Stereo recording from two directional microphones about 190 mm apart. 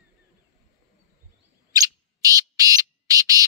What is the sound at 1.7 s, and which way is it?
Bird, 20° right (ahead or behind).